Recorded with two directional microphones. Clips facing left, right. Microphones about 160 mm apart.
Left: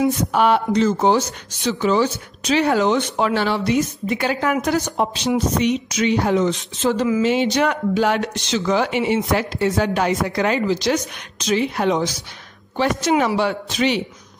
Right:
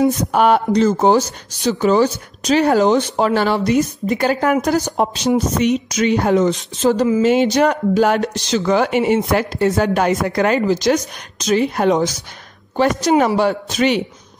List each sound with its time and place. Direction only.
0.0 s a woman's voice: 45° right (ahead or behind)
8.6 s a woman's voice: 50° right (ahead or behind)